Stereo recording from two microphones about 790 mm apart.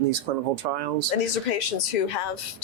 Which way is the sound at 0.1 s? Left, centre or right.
Right.